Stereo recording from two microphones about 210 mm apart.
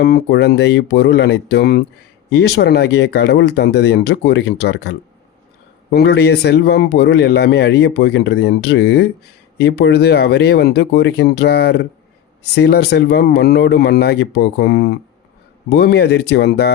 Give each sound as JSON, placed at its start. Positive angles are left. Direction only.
{"t": 0.0, "sound": "a man's voice", "side_deg": 50}